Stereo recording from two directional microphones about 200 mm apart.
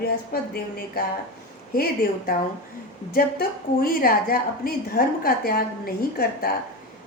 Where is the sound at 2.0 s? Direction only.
45° left (ahead or behind).